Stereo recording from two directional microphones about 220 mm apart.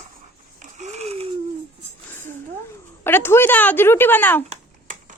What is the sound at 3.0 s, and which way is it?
A woman's voice, 10° left (ahead or behind).